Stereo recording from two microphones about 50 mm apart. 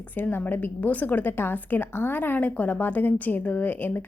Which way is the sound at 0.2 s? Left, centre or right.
Left.